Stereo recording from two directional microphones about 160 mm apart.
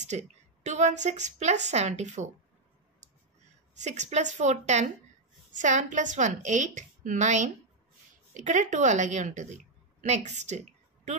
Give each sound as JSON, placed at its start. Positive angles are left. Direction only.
{"t": 0.1, "sound": "a woman's voice", "side_deg": -45}
{"t": 3.7, "sound": "a woman's voice", "side_deg": -45}